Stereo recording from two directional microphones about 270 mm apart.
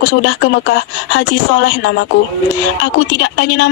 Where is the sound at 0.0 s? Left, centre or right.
Left.